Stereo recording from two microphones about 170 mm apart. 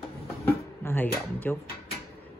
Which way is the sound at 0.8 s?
10° left (ahead or behind).